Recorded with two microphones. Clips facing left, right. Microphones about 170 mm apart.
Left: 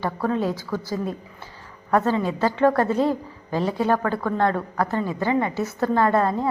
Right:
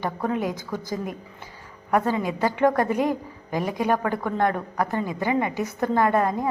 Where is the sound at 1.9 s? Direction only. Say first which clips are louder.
Left 2 dB; 15° right (ahead or behind).